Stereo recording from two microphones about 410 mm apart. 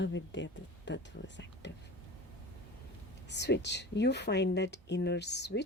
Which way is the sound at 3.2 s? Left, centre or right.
Left.